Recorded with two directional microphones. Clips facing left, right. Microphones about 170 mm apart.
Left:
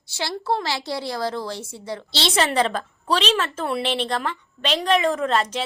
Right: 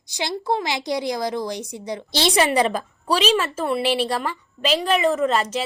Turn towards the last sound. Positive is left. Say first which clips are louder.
# right 2 dB
turn(degrees=-5)  # may be behind; listen again after turning